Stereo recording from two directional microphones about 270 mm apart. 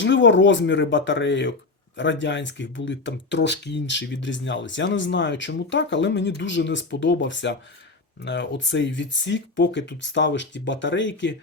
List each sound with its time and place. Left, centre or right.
0.0 s speech: left